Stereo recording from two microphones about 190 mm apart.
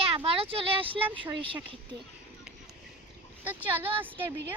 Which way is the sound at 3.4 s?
10° right (ahead or behind).